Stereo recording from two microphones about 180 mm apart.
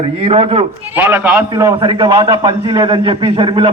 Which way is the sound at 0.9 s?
10° right (ahead or behind).